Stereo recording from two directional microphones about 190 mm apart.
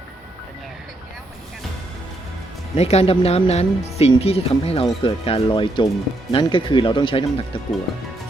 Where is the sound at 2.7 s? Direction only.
35° left (ahead or behind).